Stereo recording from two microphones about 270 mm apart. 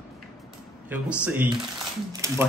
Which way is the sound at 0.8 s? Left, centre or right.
Centre.